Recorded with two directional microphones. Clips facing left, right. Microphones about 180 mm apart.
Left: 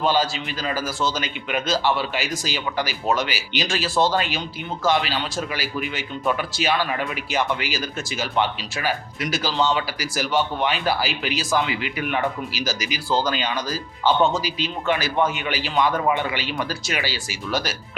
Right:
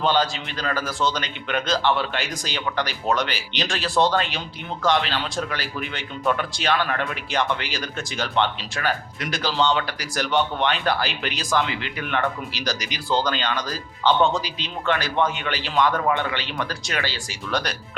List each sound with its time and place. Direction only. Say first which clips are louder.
0.0 s a man's voice: even; 5° left (ahead or behind)